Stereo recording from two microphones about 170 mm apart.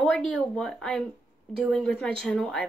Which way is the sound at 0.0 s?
5° left (ahead or behind).